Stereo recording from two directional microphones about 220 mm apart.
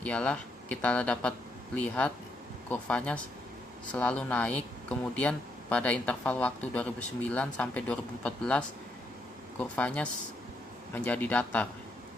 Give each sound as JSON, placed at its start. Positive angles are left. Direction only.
{"t": 0.0, "sound": "speech", "side_deg": 5}
{"t": 2.6, "sound": "speech", "side_deg": 5}